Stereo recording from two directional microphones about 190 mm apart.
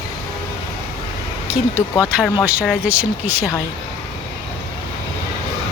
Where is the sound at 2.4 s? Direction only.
5° right (ahead or behind).